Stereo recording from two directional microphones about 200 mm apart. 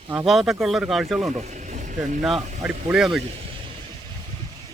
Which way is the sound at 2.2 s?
Centre (ahead or behind).